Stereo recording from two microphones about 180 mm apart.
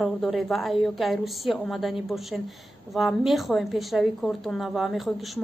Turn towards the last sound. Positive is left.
turn(degrees=0)  # may be behind; listen again after turning